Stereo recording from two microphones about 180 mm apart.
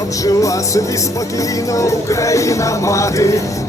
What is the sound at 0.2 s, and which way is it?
Speech, 20° left (ahead or behind).